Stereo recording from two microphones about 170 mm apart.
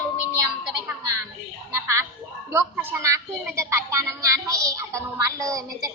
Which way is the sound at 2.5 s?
15° right (ahead or behind).